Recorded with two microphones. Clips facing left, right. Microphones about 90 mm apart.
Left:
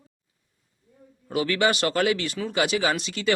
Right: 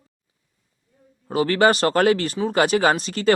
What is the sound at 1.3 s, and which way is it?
Speech, 35° right (ahead or behind).